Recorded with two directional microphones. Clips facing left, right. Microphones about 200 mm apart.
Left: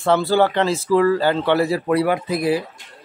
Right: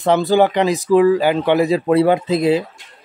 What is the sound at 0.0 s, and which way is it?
Speech, 15° right (ahead or behind).